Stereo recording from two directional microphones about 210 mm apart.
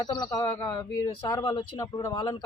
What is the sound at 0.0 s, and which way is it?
Speech, 20° left (ahead or behind).